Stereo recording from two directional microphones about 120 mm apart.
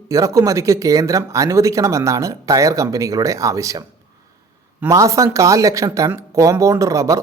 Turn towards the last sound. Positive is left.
turn(degrees=-25)  # may be behind; listen again after turning